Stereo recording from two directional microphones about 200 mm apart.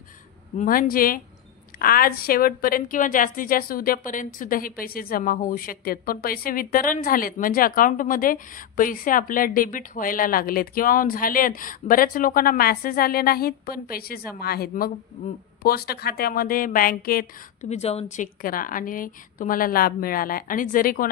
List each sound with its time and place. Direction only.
0.6 s a woman's voice: 45° left (ahead or behind)